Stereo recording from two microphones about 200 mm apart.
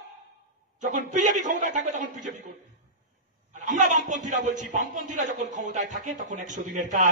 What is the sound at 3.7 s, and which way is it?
A man's voice, 35° right (ahead or behind).